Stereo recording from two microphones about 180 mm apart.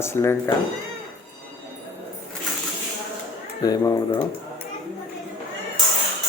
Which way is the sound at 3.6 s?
20° left (ahead or behind).